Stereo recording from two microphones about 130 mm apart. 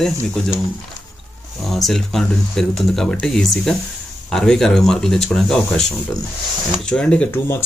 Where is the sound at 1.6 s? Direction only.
Centre (ahead or behind).